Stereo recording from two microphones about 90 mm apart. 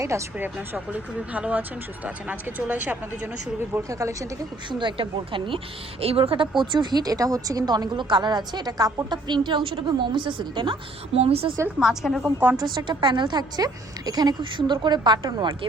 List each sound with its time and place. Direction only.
0.3 s speech: 20° right (ahead or behind)
3.8 s speech: 35° right (ahead or behind)
4.7 s a woman's voice: 65° right (ahead or behind)
6.0 s a woman's voice: 90° right
6.6 s a woman's voice: 60° right (ahead or behind)
11.2 s a woman's voice: 90° right
11.8 s a woman's voice: 5° right (ahead or behind)
12.5 s a woman's voice: 55° right (ahead or behind)